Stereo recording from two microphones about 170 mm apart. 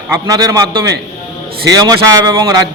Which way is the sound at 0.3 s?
20° right (ahead or behind).